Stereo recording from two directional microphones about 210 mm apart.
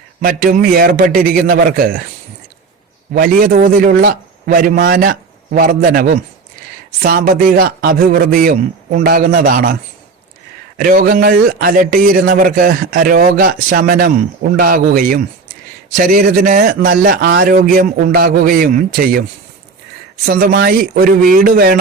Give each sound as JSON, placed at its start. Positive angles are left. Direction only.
{"t": 0.2, "sound": "a man's voice", "side_deg": -40}
{"t": 3.1, "sound": "a man's voice", "side_deg": -40}
{"t": 10.8, "sound": "a man's voice", "side_deg": -45}
{"t": 20.2, "sound": "a man's voice", "side_deg": -45}